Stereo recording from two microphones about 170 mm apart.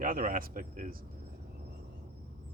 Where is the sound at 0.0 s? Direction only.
55° right (ahead or behind).